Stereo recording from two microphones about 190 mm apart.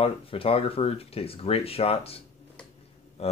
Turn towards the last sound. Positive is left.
turn(degrees=35)  # may be behind; listen again after turning